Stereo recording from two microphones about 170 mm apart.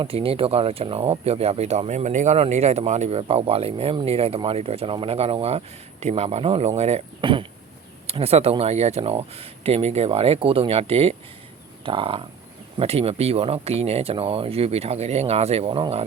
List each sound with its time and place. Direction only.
0.0 s speech: 35° right (ahead or behind)